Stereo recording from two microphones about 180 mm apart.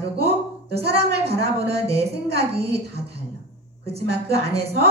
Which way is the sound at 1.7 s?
35° right (ahead or behind).